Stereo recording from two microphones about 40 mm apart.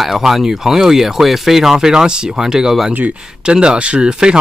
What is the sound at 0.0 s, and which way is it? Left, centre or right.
Speech, centre.